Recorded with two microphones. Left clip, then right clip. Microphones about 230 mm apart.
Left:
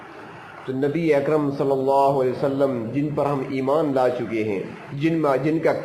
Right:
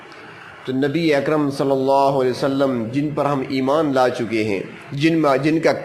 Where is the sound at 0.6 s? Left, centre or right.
Right.